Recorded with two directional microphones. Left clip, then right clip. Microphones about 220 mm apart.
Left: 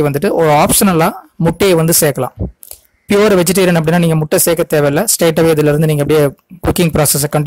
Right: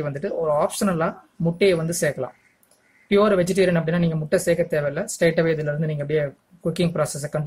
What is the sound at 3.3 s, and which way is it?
Speech, 50° left (ahead or behind).